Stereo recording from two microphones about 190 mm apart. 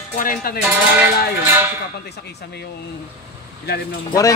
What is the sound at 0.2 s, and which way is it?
Music, 50° left (ahead or behind).